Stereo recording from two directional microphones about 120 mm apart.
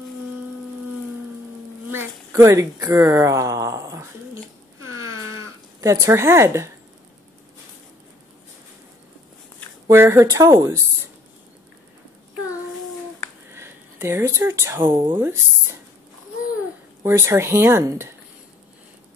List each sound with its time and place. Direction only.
1.9 s speech: 20° right (ahead or behind)
5.8 s speech: 25° right (ahead or behind)
9.8 s speech: 20° right (ahead or behind)
13.5 s a sound: 20° right (ahead or behind)
14.8 s speech: 45° right (ahead or behind)
15.1 s speech: 20° right (ahead or behind)
17.0 s speech: 20° right (ahead or behind)